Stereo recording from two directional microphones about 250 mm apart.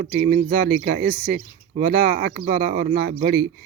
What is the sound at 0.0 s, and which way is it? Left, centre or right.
Speech, right.